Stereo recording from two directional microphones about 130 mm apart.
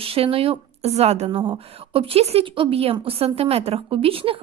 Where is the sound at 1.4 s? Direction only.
45° right (ahead or behind).